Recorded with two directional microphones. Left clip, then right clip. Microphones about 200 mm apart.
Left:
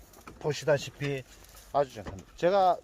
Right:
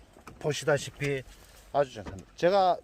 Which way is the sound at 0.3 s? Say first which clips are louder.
Even; 25° right (ahead or behind).